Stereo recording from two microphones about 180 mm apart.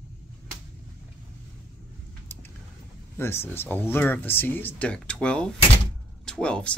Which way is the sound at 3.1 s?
15° left (ahead or behind).